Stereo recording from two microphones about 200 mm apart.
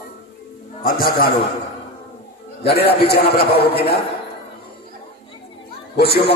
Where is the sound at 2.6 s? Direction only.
55° left (ahead or behind).